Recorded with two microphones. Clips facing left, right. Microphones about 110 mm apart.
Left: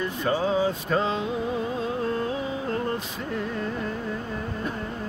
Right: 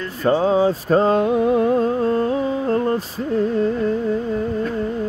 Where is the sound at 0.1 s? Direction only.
40° right (ahead or behind); by 1.9 s 60° right (ahead or behind).